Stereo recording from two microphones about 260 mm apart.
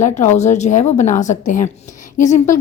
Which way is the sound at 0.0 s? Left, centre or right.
Left.